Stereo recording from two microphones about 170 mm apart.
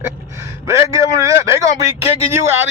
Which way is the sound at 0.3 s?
15° right (ahead or behind).